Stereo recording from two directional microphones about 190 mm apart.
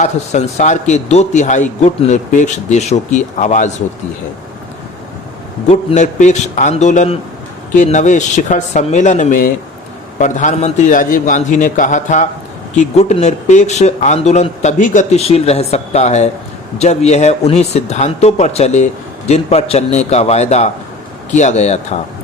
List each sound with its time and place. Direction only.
0.0 s speech: 40° left (ahead or behind)
5.6 s speech: 40° left (ahead or behind)